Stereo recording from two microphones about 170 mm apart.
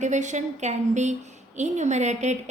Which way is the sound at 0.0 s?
45° right (ahead or behind).